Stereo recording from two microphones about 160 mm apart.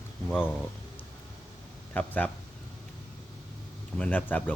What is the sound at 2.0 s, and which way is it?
Speech, 10° left (ahead or behind).